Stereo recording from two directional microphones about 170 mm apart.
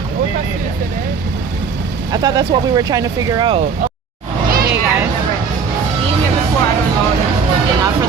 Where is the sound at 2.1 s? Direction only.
25° right (ahead or behind).